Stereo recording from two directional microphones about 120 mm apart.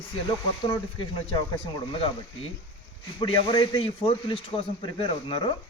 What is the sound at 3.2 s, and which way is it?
A man's voice, 40° left (ahead or behind).